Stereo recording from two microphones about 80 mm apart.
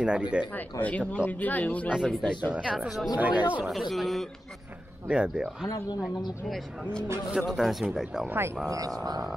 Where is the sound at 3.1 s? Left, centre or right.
Centre.